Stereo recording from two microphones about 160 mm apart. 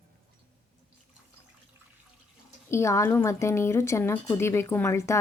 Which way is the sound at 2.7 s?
20° left (ahead or behind).